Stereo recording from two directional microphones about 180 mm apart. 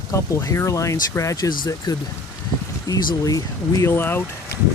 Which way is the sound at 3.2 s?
20° left (ahead or behind).